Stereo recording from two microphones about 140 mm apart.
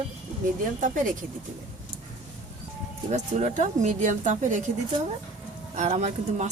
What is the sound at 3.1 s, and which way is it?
Speech, 55° right (ahead or behind).